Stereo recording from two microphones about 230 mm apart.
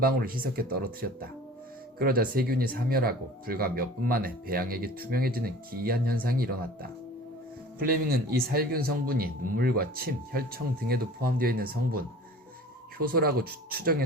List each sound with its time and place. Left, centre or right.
0.0 s speech: right